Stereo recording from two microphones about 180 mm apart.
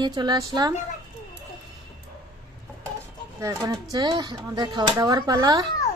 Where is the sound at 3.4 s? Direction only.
15° right (ahead or behind).